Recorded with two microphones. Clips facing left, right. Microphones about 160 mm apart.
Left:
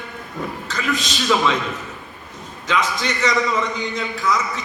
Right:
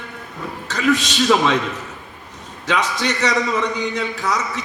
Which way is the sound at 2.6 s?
75° right (ahead or behind).